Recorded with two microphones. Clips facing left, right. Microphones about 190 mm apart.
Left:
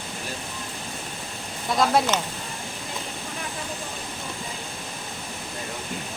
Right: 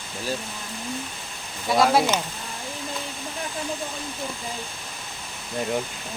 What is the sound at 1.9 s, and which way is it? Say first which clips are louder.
Speech: right 1 dB; 5° right (ahead or behind).